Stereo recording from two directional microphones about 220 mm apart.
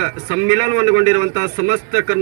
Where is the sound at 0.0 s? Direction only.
20° right (ahead or behind).